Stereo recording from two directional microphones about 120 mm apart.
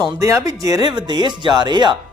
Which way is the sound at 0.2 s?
25° right (ahead or behind).